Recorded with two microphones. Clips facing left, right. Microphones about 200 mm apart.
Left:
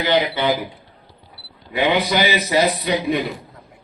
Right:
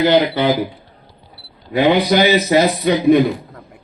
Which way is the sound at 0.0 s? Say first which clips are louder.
Right 5 dB; 40° right (ahead or behind).